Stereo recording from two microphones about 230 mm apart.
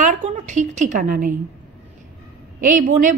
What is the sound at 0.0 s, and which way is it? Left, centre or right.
A woman's voice, right.